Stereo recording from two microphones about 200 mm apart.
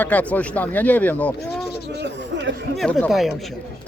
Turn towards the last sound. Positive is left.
turn(degrees=0)  # may be behind; listen again after turning